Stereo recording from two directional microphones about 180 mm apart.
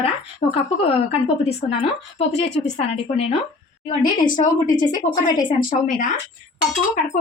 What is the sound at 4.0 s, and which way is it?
A woman's voice, 45° left (ahead or behind).